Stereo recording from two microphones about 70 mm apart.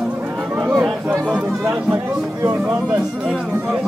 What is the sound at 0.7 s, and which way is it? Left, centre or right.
Chatter, centre.